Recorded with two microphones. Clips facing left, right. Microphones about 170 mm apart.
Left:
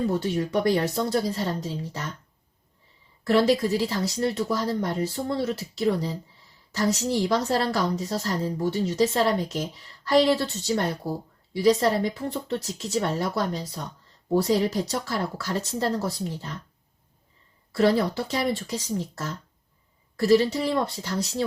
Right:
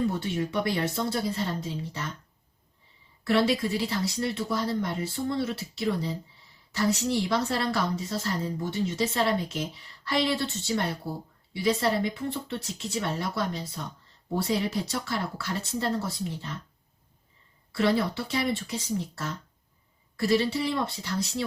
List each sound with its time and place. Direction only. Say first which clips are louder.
0.1 s a woman's voice: left 4 dB; 40° left (ahead or behind)
3.2 s a woman's voice: left 4 dB; 40° left (ahead or behind)
17.7 s a woman's voice: left 4 dB; 40° left (ahead or behind)